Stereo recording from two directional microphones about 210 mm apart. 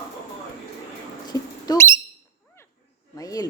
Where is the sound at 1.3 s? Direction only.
20° left (ahead or behind).